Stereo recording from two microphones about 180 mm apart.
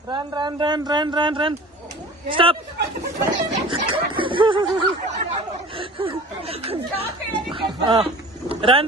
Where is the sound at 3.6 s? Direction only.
30° right (ahead or behind).